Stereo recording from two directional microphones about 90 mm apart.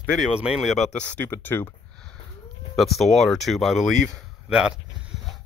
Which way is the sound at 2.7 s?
Centre (ahead or behind).